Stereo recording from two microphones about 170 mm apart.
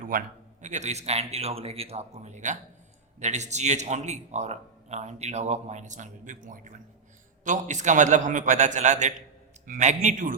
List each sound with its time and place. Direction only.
0.0 s a man's voice: 55° right (ahead or behind)